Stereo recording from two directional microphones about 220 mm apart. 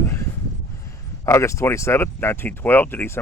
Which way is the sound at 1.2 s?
15° left (ahead or behind).